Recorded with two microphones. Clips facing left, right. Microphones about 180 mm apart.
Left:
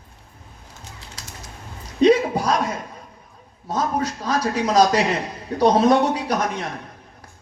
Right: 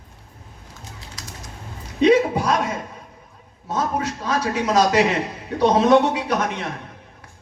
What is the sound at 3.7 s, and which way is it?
Speech, 35° left (ahead or behind).